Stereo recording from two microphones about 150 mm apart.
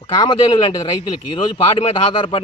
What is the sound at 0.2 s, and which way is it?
Speech, 35° left (ahead or behind).